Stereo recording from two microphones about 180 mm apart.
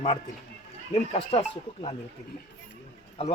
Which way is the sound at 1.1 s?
35° left (ahead or behind).